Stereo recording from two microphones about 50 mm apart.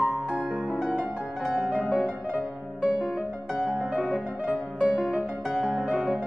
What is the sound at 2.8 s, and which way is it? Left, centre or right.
Music, right.